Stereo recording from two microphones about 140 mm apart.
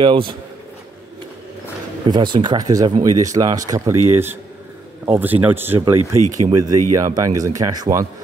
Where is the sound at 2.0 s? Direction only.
30° right (ahead or behind).